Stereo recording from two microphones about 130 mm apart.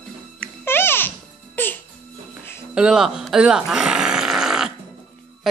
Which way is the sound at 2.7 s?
5° right (ahead or behind).